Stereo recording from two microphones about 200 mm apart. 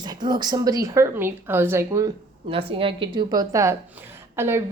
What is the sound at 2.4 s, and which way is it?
A woman's voice, 25° right (ahead or behind).